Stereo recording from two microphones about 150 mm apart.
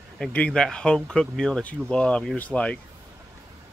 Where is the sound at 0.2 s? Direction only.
5° left (ahead or behind).